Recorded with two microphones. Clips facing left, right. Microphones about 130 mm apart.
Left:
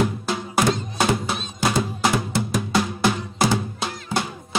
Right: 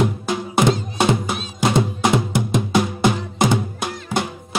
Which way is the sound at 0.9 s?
20° right (ahead or behind).